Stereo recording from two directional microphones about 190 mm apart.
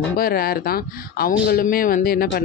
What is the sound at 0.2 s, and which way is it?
Speech, 50° left (ahead or behind).